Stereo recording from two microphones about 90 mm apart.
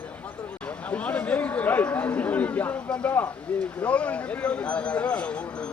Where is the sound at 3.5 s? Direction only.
15° left (ahead or behind).